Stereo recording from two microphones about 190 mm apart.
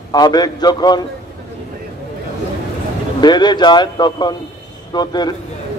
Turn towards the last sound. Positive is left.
turn(degrees=20)  # may be behind; listen again after turning